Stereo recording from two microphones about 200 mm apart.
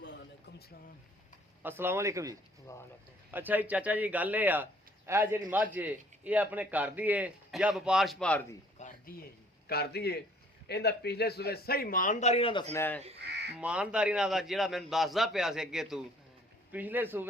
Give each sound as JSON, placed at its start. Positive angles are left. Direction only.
{"t": 1.6, "sound": "a man's voice", "side_deg": -10}
{"t": 2.7, "sound": "speech", "side_deg": 15}
{"t": 3.3, "sound": "a man's voice", "side_deg": -10}
{"t": 8.8, "sound": "a sound", "side_deg": 35}
{"t": 9.6, "sound": "speech", "side_deg": 50}
{"t": 12.7, "sound": "speech", "side_deg": 10}
{"t": 13.1, "sound": "crow", "side_deg": -55}
{"t": 13.6, "sound": "a man's voice", "side_deg": -5}